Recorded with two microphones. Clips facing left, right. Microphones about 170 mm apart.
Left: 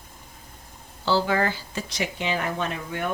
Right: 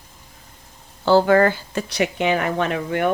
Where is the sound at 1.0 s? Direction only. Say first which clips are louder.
Right 8 dB; 55° right (ahead or behind).